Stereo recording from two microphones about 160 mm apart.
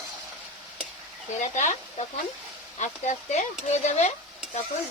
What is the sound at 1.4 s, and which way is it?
Stir, 50° left (ahead or behind).